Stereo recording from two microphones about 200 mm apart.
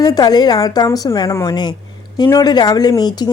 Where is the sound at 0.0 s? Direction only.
20° left (ahead or behind).